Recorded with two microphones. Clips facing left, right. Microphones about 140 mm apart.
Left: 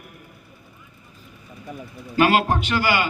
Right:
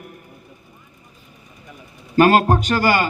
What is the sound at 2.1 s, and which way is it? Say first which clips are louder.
Speech: right 4 dB; 45° right (ahead or behind).